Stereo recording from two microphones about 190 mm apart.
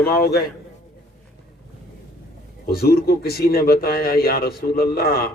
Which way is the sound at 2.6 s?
55° left (ahead or behind).